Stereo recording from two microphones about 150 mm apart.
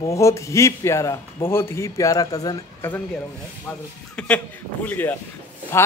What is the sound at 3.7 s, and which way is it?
A man's voice, 10° left (ahead or behind).